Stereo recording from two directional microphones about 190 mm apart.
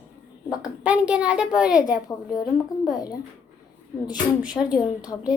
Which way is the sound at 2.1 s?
20° left (ahead or behind).